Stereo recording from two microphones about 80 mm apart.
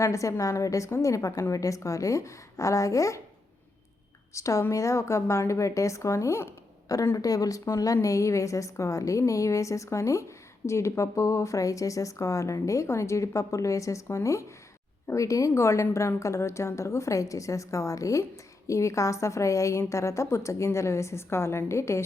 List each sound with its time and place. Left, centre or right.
0.0 s speech: left
4.4 s speech: left